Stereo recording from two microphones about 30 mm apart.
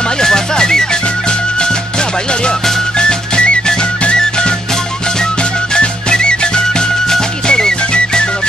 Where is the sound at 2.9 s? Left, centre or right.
Left.